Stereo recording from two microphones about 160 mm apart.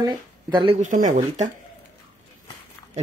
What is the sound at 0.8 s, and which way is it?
Speech, 50° right (ahead or behind).